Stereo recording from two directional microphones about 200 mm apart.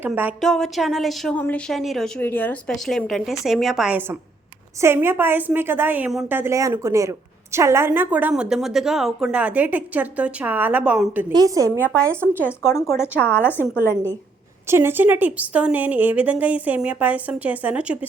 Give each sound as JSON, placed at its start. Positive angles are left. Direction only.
{"t": 0.0, "sound": "a woman's voice", "side_deg": -10}
{"t": 11.3, "sound": "a woman's voice", "side_deg": -20}
{"t": 12.9, "sound": "speech", "side_deg": 10}
{"t": 14.7, "sound": "a woman's voice", "side_deg": -10}